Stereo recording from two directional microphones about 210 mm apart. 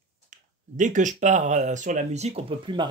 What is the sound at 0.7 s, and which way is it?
Speech, 35° right (ahead or behind).